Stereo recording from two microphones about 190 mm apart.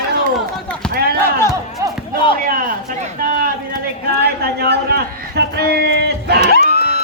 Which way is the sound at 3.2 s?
45° right (ahead or behind).